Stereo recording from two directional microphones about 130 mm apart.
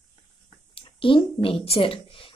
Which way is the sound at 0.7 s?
45° left (ahead or behind).